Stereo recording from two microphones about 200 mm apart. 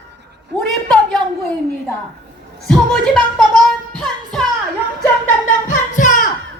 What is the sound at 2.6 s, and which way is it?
Music, 5° left (ahead or behind).